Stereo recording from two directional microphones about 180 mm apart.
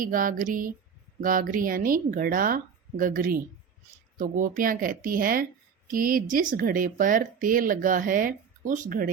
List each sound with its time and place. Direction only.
0.0 s speech: 50° right (ahead or behind)